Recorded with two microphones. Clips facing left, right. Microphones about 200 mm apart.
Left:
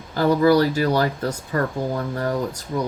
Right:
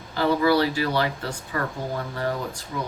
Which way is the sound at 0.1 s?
45° left (ahead or behind).